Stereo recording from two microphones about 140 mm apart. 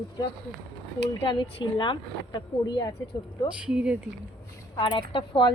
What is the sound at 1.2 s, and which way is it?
Speech, 35° left (ahead or behind).